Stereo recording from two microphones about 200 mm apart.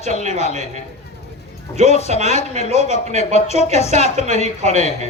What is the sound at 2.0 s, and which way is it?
Speech, 35° right (ahead or behind).